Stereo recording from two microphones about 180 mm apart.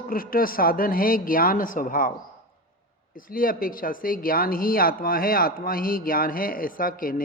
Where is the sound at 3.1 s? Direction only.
50° left (ahead or behind).